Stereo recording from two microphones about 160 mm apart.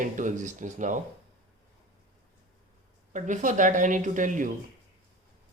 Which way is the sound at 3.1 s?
50° right (ahead or behind).